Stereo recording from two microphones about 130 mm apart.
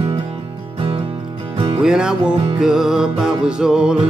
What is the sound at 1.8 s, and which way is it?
Music, 5° right (ahead or behind).